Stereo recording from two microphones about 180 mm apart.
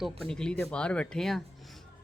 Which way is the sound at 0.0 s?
5° left (ahead or behind).